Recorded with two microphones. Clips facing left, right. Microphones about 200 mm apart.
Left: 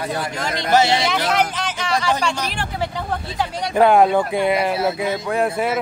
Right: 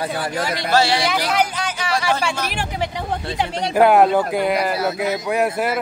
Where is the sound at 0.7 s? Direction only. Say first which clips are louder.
Left 2 dB; 20° left (ahead or behind).